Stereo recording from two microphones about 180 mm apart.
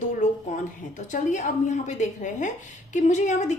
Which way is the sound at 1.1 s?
45° left (ahead or behind).